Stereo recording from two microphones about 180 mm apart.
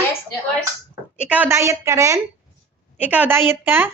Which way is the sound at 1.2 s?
10° right (ahead or behind).